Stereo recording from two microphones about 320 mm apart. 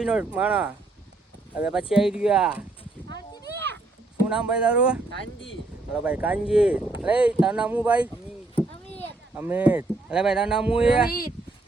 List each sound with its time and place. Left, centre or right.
0.0 s speech: centre
3.5 s a sound: right
4.3 s speech: centre
8.1 s a sound: centre
9.3 s speech: centre
10.8 s speech: centre